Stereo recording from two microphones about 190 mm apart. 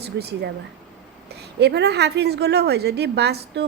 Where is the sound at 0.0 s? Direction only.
60° right (ahead or behind).